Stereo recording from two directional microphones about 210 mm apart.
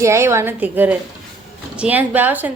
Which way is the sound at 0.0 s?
15° right (ahead or behind).